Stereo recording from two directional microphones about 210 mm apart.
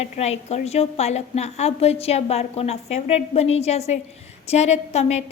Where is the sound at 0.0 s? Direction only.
30° left (ahead or behind).